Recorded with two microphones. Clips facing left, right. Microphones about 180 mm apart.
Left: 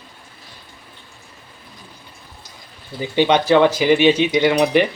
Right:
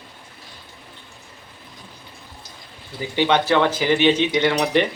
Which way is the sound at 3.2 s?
15° left (ahead or behind).